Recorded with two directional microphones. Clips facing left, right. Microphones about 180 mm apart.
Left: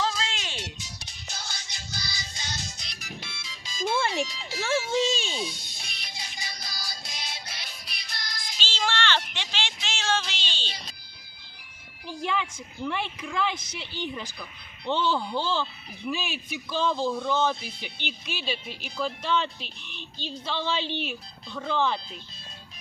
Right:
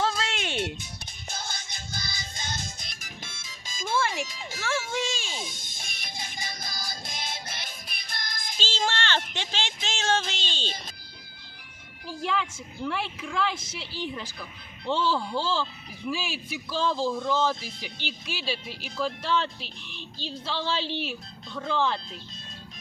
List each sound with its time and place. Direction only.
0.0 s music: 55° right (ahead or behind)
4.3 s speech: 45° right (ahead or behind)
5.1 s snake: 20° left (ahead or behind)
5.4 s music: 45° right (ahead or behind)
12.2 s speech: centre (ahead or behind)
18.3 s speech: 5° right (ahead or behind)